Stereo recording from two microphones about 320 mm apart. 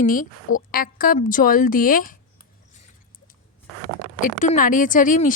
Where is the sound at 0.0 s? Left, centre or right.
Left.